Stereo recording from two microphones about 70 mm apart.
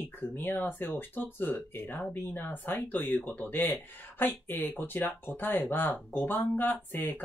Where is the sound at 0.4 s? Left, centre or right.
Left.